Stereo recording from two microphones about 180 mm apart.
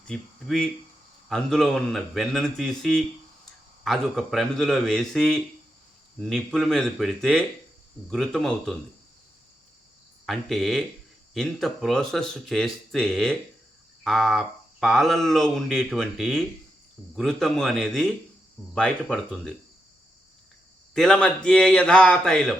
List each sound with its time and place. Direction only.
0.1 s speech: 5° left (ahead or behind)
10.2 s speech: centre (ahead or behind)
20.9 s speech: 5° left (ahead or behind)